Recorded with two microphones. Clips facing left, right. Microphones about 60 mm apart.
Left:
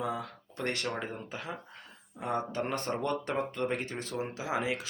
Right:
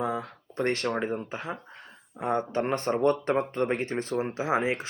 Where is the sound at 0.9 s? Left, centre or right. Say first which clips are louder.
Right 7 dB; right.